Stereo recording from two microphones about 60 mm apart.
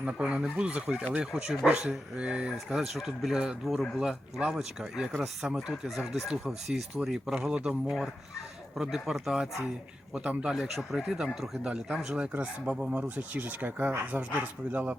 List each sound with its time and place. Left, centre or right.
0.0 s speech: centre
10.5 s speech: centre; by 14.9 s right